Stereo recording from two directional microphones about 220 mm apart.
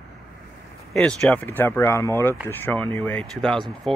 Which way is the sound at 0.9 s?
5° left (ahead or behind).